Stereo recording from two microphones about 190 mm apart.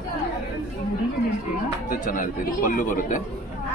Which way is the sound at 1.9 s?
45° left (ahead or behind).